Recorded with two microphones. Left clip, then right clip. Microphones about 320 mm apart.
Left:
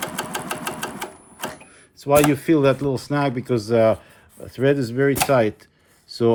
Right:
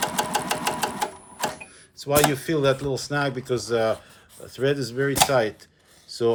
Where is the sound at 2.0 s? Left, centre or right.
Centre.